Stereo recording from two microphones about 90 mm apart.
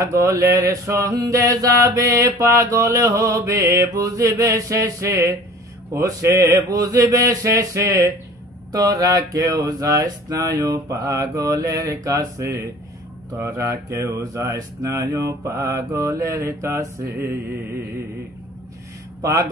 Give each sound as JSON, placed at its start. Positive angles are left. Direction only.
{"t": 0.0, "sound": "mantra", "side_deg": -35}